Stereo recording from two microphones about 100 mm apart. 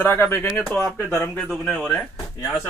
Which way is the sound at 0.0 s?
20° left (ahead or behind).